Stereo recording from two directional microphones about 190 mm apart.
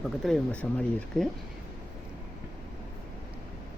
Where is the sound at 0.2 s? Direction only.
5° left (ahead or behind).